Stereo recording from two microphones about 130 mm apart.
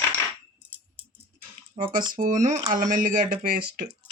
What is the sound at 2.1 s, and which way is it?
Speech, 90° right.